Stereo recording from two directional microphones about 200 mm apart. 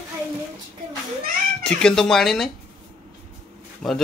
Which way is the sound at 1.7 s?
5° left (ahead or behind).